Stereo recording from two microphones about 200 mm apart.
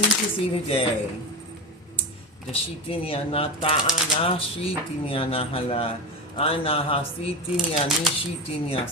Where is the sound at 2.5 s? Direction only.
30° left (ahead or behind).